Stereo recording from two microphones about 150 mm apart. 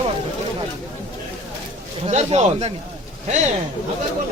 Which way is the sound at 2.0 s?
50° right (ahead or behind).